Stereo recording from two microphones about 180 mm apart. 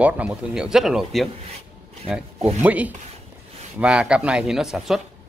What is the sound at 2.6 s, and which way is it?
A man's voice, 10° right (ahead or behind).